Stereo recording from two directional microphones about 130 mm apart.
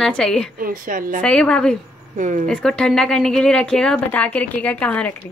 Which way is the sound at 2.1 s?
75° right (ahead or behind).